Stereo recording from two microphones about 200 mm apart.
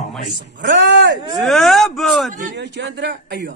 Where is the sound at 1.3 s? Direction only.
Centre (ahead or behind).